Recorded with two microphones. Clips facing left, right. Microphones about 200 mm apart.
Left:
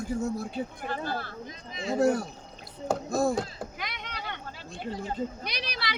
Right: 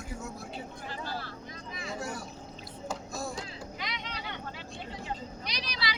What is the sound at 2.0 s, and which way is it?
Speech, 55° left (ahead or behind).